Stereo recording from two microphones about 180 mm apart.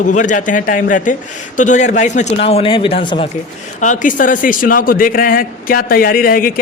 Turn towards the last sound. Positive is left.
turn(degrees=50)  # may be behind; listen again after turning